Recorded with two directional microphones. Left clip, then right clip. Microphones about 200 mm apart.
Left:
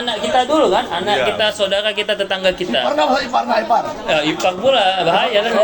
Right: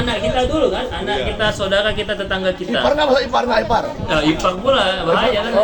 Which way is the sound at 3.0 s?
45° right (ahead or behind).